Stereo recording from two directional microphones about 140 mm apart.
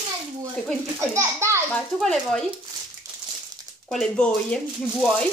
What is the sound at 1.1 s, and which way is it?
Speech, 20° right (ahead or behind).